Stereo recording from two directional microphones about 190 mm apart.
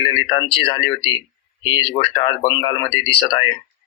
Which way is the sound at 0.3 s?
25° left (ahead or behind).